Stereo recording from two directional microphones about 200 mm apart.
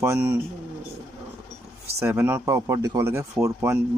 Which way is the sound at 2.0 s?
10° right (ahead or behind).